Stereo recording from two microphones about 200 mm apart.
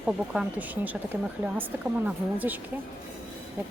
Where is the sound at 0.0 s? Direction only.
5° right (ahead or behind).